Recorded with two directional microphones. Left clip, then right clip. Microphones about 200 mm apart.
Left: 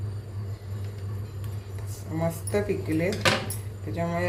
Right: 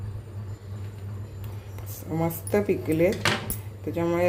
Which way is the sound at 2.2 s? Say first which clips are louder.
Right 2 dB; 45° right (ahead or behind).